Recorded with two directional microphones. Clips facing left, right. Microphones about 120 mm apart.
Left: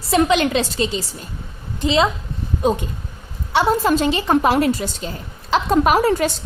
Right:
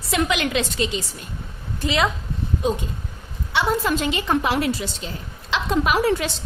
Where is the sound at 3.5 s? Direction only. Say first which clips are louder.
Left 5 dB; 40° left (ahead or behind).